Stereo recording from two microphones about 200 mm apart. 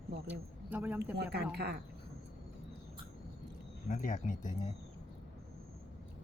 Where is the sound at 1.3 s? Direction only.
50° right (ahead or behind).